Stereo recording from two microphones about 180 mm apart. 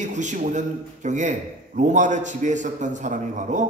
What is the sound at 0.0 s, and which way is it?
A man's voice, 40° right (ahead or behind).